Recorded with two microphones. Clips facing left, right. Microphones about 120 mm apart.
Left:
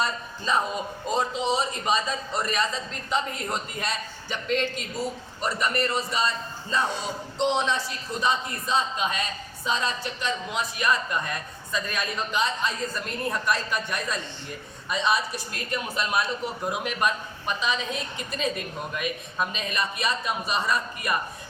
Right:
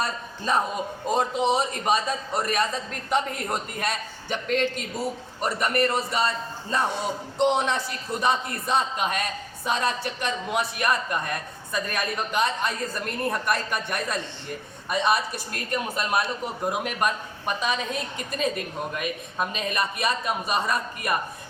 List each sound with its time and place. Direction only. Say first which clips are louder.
0.0 s a woman's voice: even; 50° right (ahead or behind)